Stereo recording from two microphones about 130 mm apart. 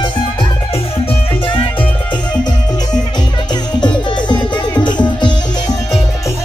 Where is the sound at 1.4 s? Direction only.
40° left (ahead or behind).